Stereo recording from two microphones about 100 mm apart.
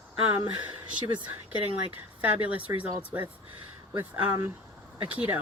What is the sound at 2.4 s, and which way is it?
Speech, 15° right (ahead or behind).